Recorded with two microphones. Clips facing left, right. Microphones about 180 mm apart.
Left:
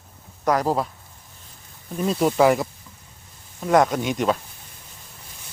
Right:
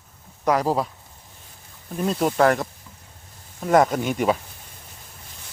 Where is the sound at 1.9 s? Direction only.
Centre (ahead or behind).